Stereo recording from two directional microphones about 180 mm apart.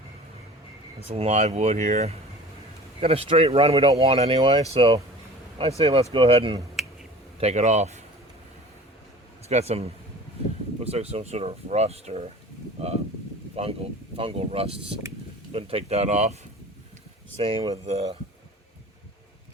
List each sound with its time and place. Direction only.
1.1 s speech: 35° right (ahead or behind)
9.5 s speech: 35° right (ahead or behind)
17.4 s speech: 30° right (ahead or behind)